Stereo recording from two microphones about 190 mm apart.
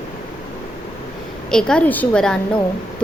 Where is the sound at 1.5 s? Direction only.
5° left (ahead or behind).